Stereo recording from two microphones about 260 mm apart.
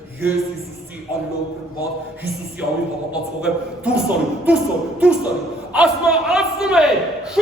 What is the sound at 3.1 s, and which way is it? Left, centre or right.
Speech, centre.